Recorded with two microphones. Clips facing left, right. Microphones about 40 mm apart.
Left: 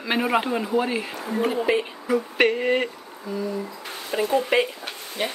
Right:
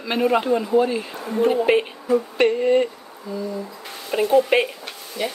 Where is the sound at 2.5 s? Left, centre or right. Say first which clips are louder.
Right 4 dB; left.